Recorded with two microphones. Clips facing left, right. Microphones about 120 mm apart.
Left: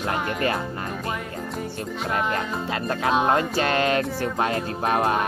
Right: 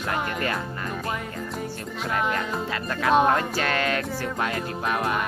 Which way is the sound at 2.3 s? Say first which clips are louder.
Left 1 dB; 30° left (ahead or behind).